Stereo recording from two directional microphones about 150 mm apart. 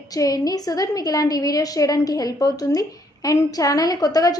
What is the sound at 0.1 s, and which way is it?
A woman's voice, 25° left (ahead or behind).